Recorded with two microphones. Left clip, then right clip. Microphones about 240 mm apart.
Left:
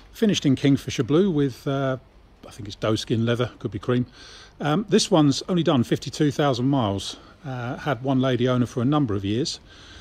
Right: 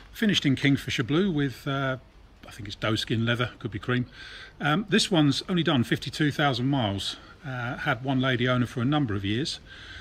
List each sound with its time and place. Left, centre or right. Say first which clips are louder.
0.2 s speech: left 3 dB; centre